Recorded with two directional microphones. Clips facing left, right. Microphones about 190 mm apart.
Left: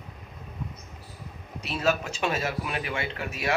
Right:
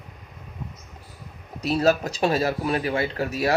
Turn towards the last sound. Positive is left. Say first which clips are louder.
# right 7 dB
turn(degrees=-35)  # may be behind; listen again after turning